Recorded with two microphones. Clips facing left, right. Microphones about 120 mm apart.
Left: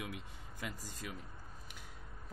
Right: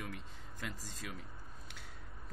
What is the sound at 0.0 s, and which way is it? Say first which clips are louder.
Speech: left 1 dB; 10° left (ahead or behind).